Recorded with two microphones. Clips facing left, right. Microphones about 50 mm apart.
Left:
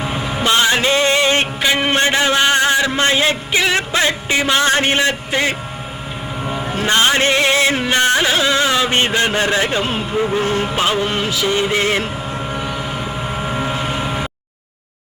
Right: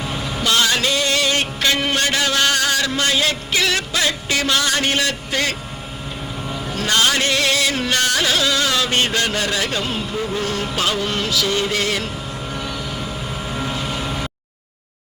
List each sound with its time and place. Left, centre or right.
0.0 s vehicle: left
1.6 s a man's voice: left
6.4 s music: left